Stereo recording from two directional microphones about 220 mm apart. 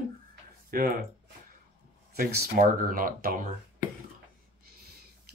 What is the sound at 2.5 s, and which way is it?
Speech, 40° right (ahead or behind).